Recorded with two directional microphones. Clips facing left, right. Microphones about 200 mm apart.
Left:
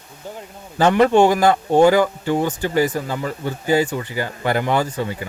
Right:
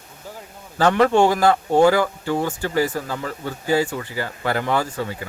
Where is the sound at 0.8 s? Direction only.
20° left (ahead or behind).